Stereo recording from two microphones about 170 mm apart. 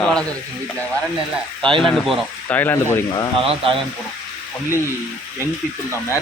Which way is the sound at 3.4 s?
30° right (ahead or behind).